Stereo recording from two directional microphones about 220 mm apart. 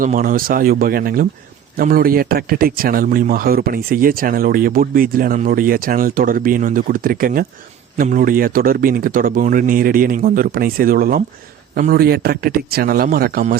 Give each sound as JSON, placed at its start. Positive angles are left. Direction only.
{"t": 0.0, "sound": "a man's voice", "side_deg": -40}